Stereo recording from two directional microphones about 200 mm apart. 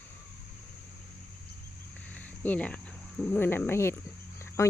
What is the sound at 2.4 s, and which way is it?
Speech, 10° left (ahead or behind).